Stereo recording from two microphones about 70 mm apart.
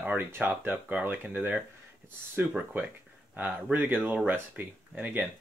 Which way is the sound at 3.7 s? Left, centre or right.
Right.